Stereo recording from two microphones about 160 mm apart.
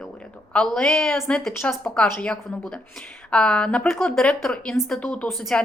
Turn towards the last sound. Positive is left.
turn(degrees=0)  # may be behind; listen again after turning